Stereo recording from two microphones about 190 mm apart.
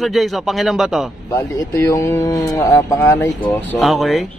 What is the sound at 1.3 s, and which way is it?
Speech, 15° left (ahead or behind).